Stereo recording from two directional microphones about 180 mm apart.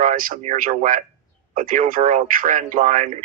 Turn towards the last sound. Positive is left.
turn(degrees=-45)  # may be behind; listen again after turning